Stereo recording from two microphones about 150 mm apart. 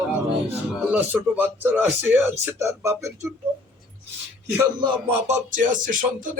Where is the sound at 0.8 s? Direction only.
10° right (ahead or behind).